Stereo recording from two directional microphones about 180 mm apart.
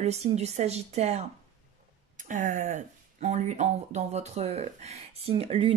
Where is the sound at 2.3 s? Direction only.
40° right (ahead or behind).